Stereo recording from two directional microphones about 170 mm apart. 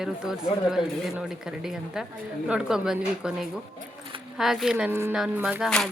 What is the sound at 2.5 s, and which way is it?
A woman's voice, 5° right (ahead or behind).